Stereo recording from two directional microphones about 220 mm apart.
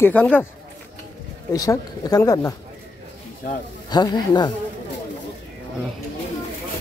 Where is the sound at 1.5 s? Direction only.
15° left (ahead or behind).